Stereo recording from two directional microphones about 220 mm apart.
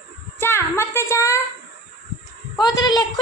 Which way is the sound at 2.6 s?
20° left (ahead or behind).